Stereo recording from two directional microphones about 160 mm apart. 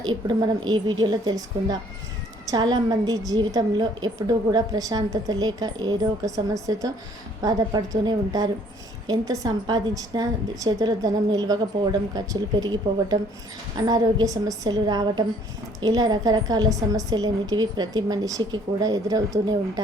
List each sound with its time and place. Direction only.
0.0 s a woman's voice: 25° right (ahead or behind)